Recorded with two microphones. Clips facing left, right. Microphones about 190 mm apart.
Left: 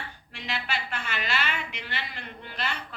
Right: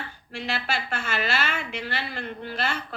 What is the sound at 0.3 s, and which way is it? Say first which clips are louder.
Speech: right 4 dB; 45° right (ahead or behind).